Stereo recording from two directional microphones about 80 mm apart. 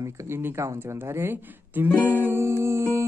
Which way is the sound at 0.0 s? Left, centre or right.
Right.